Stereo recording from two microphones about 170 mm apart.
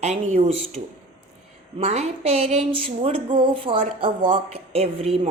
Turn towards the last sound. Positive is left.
turn(degrees=-40)  # may be behind; listen again after turning